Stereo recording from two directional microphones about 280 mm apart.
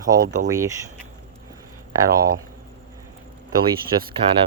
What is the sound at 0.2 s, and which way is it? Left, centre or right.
Speech, right.